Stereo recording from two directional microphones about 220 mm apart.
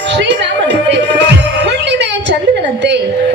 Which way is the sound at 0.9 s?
50° right (ahead or behind).